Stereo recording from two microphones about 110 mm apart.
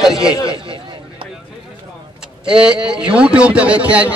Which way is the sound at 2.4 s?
10° right (ahead or behind).